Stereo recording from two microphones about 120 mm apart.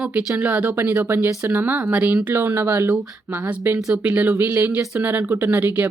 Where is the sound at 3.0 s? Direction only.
10° right (ahead or behind).